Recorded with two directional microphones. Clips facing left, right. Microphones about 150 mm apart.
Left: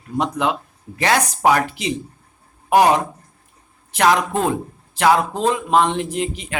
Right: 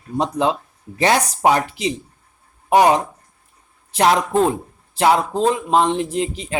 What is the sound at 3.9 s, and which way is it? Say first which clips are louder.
Speech: right 1 dB; 25° right (ahead or behind).